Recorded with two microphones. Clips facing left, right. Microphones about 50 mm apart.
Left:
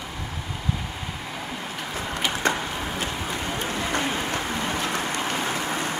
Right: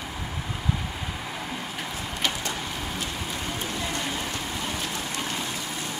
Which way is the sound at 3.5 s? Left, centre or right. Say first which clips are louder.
Left 6 dB; left.